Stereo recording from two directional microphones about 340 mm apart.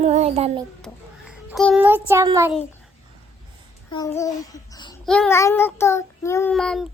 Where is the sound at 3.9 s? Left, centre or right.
Centre.